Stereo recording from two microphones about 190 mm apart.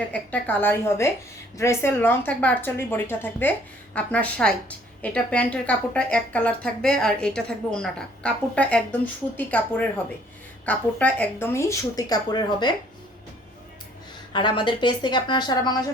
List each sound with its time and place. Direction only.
0.1 s a woman's voice: 5° left (ahead or behind)
14.3 s a woman's voice: 25° left (ahead or behind)